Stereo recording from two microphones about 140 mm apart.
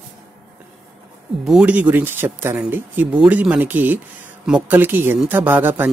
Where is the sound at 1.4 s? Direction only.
5° right (ahead or behind).